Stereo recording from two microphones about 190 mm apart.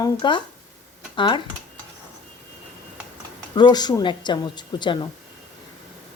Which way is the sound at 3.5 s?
20° left (ahead or behind).